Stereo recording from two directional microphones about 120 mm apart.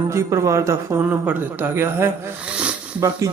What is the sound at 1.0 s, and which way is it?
Speech, 15° right (ahead or behind).